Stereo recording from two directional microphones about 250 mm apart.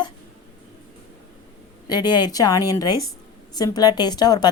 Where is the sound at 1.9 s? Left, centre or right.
Centre.